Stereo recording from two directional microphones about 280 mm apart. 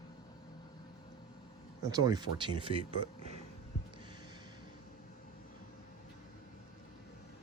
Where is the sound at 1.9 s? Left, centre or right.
Centre.